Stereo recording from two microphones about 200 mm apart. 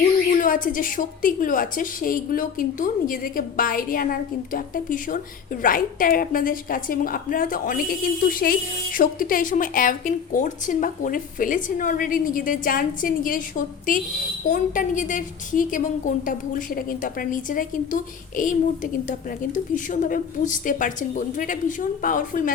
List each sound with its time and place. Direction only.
0.3 s a woman's voice: 40° left (ahead or behind)